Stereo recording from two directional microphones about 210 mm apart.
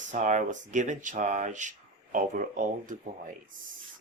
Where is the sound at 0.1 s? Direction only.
35° right (ahead or behind).